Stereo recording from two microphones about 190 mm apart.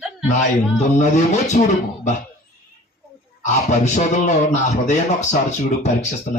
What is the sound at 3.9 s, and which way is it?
Speech, 40° left (ahead or behind).